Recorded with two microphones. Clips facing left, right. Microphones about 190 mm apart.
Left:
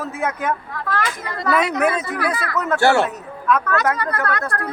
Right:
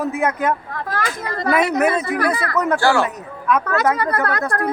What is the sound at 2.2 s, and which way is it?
Speech, 45° right (ahead or behind).